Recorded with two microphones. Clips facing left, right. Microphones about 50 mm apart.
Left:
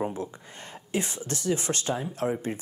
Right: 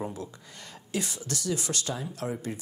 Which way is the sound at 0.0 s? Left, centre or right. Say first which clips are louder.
Left 5 dB; left.